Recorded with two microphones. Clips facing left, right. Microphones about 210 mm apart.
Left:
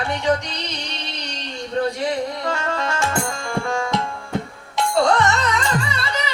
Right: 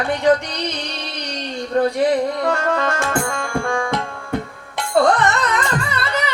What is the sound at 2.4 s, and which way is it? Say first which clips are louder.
Music: right 5 dB; 55° right (ahead or behind).